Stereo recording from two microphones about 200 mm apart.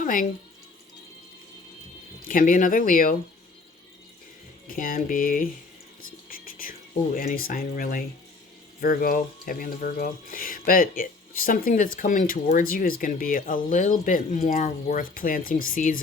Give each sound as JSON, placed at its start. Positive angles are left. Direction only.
{"t": 0.0, "sound": "speech", "side_deg": 40}
{"t": 2.2, "sound": "speech", "side_deg": 40}
{"t": 4.7, "sound": "speech", "side_deg": 45}
{"t": 6.2, "sound": "whispering", "side_deg": 45}
{"t": 8.8, "sound": "speech", "side_deg": 45}